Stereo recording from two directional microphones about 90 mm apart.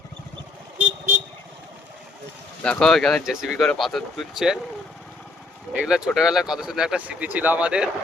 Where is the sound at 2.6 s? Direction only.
10° left (ahead or behind).